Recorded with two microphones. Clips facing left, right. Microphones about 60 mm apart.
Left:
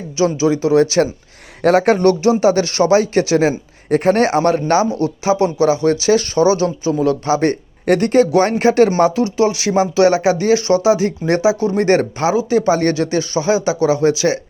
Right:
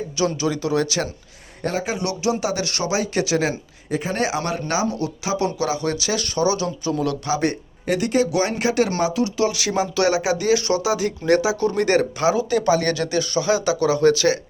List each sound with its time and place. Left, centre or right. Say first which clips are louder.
0.2 s speech: left 7 dB; left
1.6 s speech: left 13 dB; left
3.8 s speech: left 10 dB; left
7.9 s speech: left 7 dB; left; by 14.3 s centre